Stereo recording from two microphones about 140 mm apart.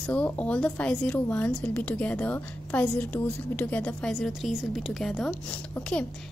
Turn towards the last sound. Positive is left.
turn(degrees=10)  # may be behind; listen again after turning